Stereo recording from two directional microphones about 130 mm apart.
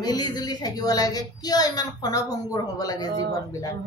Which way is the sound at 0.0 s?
30° left (ahead or behind).